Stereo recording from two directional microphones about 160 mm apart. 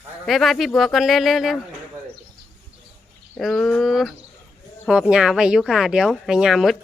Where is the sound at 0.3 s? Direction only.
Centre (ahead or behind).